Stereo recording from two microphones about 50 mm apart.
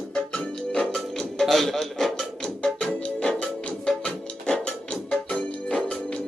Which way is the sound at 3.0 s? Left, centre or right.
Left.